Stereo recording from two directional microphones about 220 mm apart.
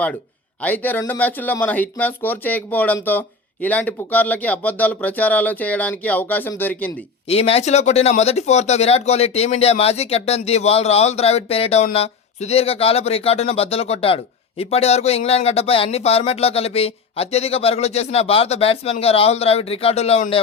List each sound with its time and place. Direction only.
0.6 s speech: 5° left (ahead or behind)
7.3 s speech: 25° left (ahead or behind)